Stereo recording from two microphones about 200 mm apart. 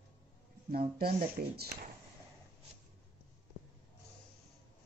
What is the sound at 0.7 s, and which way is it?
Speech, 50° right (ahead or behind).